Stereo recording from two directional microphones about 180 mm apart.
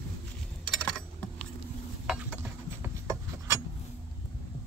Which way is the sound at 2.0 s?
5° right (ahead or behind).